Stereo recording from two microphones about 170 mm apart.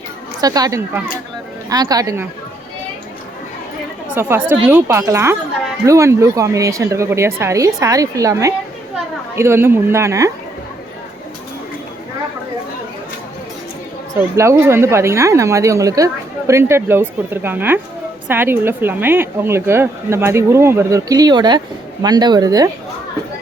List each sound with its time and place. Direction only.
0.4 s speech: 20° right (ahead or behind)
4.1 s speech: 15° right (ahead or behind)
14.1 s speech: 15° right (ahead or behind)